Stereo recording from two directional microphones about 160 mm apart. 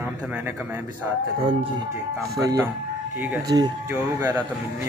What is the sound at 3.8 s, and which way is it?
Speech, 10° right (ahead or behind).